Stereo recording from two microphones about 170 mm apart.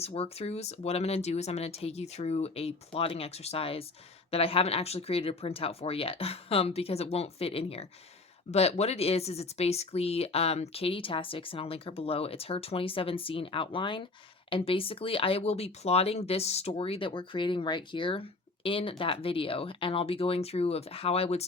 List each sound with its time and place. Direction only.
0.0 s speech: 35° left (ahead or behind)